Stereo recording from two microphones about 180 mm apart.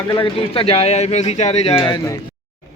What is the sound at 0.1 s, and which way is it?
Speech, 30° left (ahead or behind).